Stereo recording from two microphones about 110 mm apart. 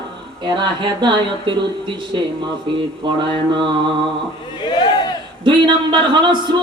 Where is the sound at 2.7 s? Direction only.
45° right (ahead or behind).